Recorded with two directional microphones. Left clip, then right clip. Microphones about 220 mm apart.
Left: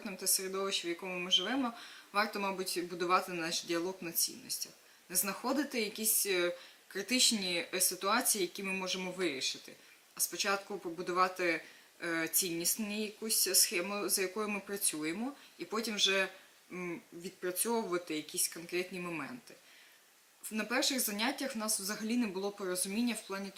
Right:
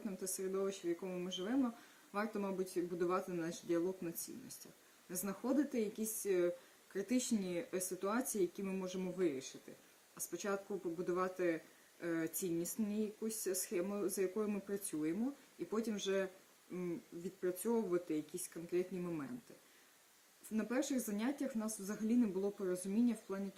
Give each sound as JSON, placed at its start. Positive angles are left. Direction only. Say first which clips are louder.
{"t": 0.0, "sound": "speech", "louder": "left 6 dB", "side_deg": -5}
{"t": 3.8, "sound": "speech", "louder": "left 2 dB", "side_deg": -15}
{"t": 4.1, "sound": "speech", "louder": "left 12 dB", "side_deg": 0}
{"t": 20.5, "sound": "speech", "louder": "left 6 dB", "side_deg": -5}
{"t": 22.4, "sound": "speech", "louder": "left 2 dB", "side_deg": -15}
{"t": 22.7, "sound": "speech", "louder": "left 2 dB", "side_deg": -5}